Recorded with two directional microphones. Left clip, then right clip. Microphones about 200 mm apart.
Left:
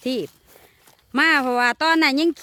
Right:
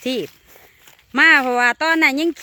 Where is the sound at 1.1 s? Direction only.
10° left (ahead or behind).